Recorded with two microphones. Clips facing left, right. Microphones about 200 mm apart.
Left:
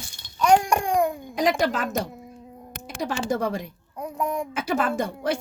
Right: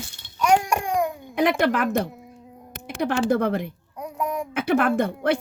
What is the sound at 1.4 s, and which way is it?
A woman's voice, 60° right (ahead or behind).